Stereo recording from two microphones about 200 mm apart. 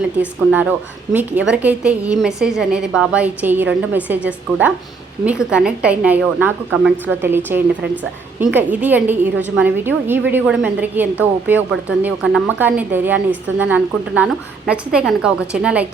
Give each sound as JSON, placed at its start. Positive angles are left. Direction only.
{"t": 0.2, "sound": "a woman's voice", "side_deg": -5}